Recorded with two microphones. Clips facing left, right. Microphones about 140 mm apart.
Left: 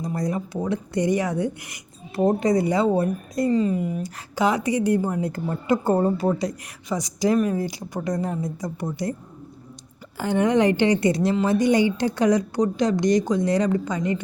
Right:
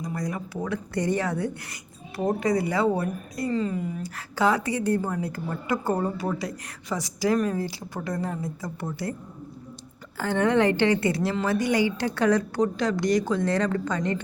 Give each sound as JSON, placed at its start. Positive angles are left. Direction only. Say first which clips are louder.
{"t": 0.0, "sound": "a woman's voice", "louder": "left 5 dB", "side_deg": 25}
{"t": 10.2, "sound": "a woman's voice", "louder": "left 2 dB", "side_deg": 15}